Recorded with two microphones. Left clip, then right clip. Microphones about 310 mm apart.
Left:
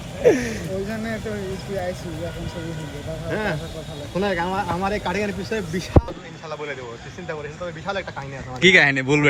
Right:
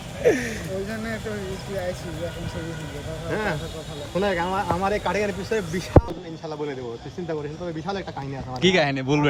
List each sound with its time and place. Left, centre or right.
0.2 s speech: centre
3.2 s speech: centre
8.6 s speech: centre